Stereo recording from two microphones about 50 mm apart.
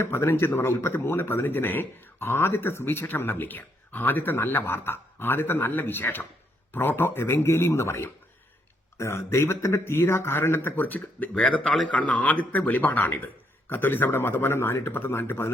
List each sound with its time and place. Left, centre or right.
0.0 s speech: left
11.3 s a man's voice: left